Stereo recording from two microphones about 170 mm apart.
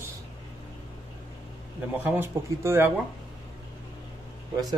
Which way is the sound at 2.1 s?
15° right (ahead or behind).